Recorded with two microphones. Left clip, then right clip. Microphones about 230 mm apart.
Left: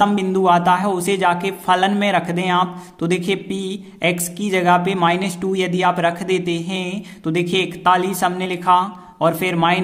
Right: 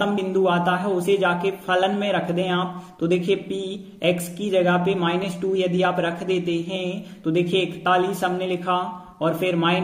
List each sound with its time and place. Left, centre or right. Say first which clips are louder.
0.0 s speech: left 5 dB; left